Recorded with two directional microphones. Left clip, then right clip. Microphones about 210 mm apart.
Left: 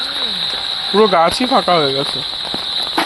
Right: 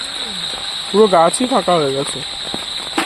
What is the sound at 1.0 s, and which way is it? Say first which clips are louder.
Speech: right 1 dB; centre (ahead or behind).